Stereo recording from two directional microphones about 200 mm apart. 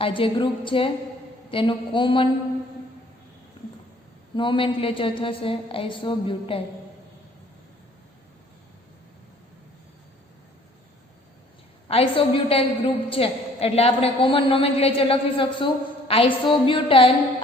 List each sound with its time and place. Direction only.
0.0 s a woman's voice: 25° left (ahead or behind)
3.6 s a sound: 25° left (ahead or behind)
4.4 s a woman's voice: 25° left (ahead or behind)
11.9 s a woman's voice: 30° left (ahead or behind)